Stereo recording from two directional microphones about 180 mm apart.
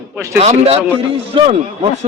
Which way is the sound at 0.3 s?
35° right (ahead or behind).